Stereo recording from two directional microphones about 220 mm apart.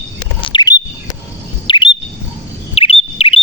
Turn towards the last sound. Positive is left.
turn(degrees=25)  # may be behind; listen again after turning